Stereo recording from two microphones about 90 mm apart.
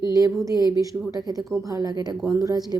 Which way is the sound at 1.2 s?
45° right (ahead or behind).